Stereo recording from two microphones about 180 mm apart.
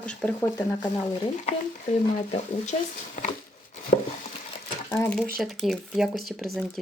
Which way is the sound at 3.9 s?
45° left (ahead or behind).